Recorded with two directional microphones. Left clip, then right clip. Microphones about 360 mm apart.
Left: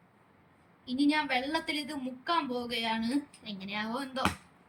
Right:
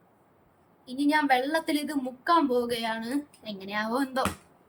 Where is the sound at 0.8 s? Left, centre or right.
Centre.